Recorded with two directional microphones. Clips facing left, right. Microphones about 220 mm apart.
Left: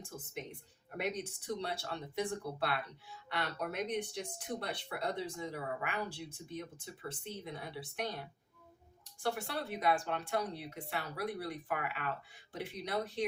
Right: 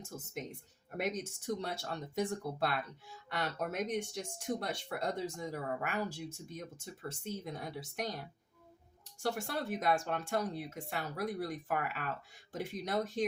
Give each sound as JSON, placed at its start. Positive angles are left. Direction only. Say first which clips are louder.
{"t": 0.0, "sound": "speech", "louder": "right 2 dB", "side_deg": -45}
{"t": 9.2, "sound": "speech", "louder": "right 1 dB", "side_deg": -45}